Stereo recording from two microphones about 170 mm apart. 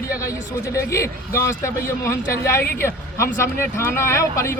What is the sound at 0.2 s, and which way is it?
A man's voice, 20° left (ahead or behind).